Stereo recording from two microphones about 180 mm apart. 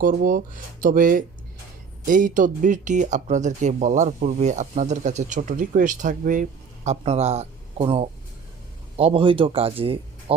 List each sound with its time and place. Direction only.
0.0 s speech: 55° right (ahead or behind); by 10.3 s 30° right (ahead or behind)